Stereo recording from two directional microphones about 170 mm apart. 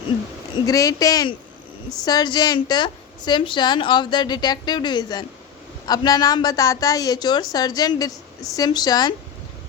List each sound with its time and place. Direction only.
0.6 s a woman's voice: 20° left (ahead or behind)